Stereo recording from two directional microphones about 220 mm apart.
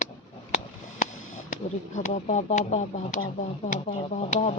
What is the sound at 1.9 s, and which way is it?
Speech, 35° left (ahead or behind).